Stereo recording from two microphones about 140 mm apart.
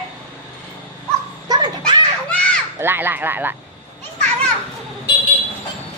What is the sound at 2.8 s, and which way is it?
Speech, 15° right (ahead or behind).